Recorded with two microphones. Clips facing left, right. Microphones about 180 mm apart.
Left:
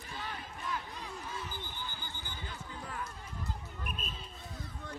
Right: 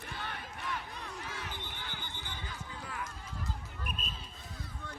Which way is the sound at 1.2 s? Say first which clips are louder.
Left 1 dB; 85° right.